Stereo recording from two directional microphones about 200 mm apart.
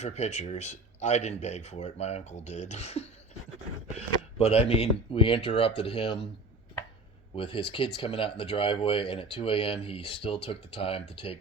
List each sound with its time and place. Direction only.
0.0 s speech: 35° left (ahead or behind)
4.4 s speech: 30° left (ahead or behind)
7.3 s speech: 25° left (ahead or behind)